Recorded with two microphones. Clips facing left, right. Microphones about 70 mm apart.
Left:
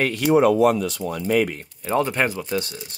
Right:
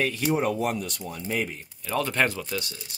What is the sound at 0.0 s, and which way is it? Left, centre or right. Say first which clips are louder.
Speech: left 8 dB; left.